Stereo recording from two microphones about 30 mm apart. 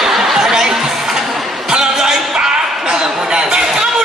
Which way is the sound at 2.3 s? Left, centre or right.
Right.